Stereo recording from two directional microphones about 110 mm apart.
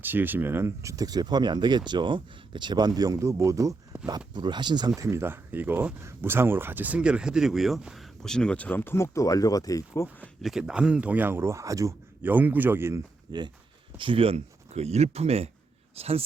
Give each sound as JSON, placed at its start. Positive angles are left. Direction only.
{"t": 0.0, "sound": "speech", "side_deg": -15}
{"t": 4.4, "sound": "speech", "side_deg": -45}
{"t": 4.9, "sound": "speech", "side_deg": -25}
{"t": 10.4, "sound": "speech", "side_deg": -5}
{"t": 12.2, "sound": "speech", "side_deg": -15}
{"t": 13.3, "sound": "speech", "side_deg": -40}
{"t": 14.0, "sound": "speech", "side_deg": -55}